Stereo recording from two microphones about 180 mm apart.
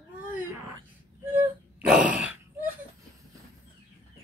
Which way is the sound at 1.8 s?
5° right (ahead or behind).